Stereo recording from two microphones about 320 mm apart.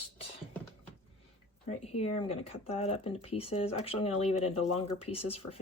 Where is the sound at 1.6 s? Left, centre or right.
Centre.